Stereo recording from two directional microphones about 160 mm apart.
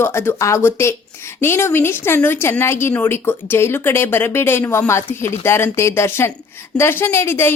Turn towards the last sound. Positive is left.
turn(degrees=15)  # may be behind; listen again after turning